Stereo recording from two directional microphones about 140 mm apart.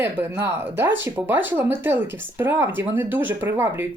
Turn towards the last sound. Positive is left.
turn(degrees=-15)  # may be behind; listen again after turning